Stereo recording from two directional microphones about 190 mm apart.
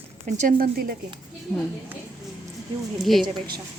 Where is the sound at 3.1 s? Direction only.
Centre (ahead or behind).